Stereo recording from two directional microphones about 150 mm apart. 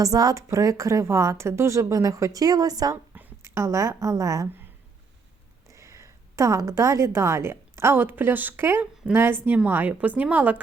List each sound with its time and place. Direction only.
0.0 s a woman's voice: 25° right (ahead or behind)
3.2 s a woman's voice: 15° right (ahead or behind)
5.6 s a woman's voice: 20° right (ahead or behind)